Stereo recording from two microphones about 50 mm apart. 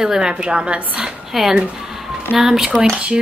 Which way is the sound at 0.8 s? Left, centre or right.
Right.